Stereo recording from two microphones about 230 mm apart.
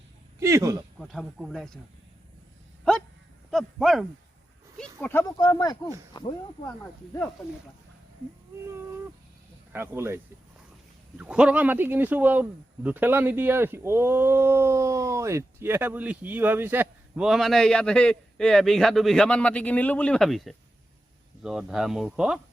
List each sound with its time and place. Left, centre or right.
0.3 s speech: centre
0.9 s speech: centre
3.5 s speech: centre
9.7 s speech: centre
11.2 s speech: centre